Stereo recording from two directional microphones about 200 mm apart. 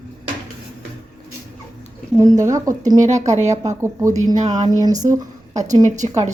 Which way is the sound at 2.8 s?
35° right (ahead or behind).